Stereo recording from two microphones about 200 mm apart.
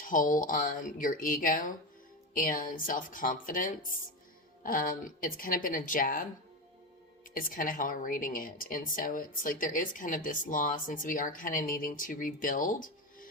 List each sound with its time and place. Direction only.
0.0 s speech: 40° left (ahead or behind)
7.3 s speech: 45° left (ahead or behind)